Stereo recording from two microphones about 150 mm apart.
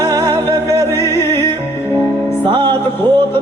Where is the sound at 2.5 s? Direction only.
30° right (ahead or behind).